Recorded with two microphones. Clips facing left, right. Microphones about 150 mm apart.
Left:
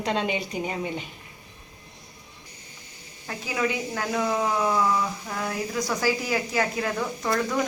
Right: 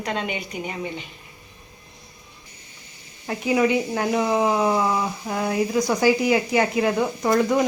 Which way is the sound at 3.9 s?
20° right (ahead or behind).